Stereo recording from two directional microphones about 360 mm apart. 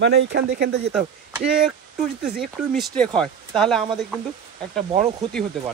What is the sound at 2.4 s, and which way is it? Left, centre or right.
Speech, centre.